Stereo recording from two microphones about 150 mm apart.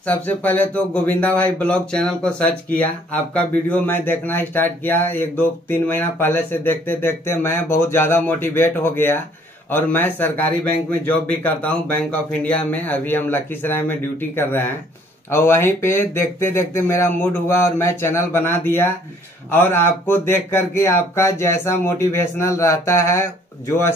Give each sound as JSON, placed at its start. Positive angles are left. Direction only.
{"t": 0.0, "sound": "speech", "side_deg": 10}